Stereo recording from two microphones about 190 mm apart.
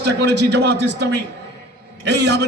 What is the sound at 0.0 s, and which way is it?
A man's voice, 65° right (ahead or behind).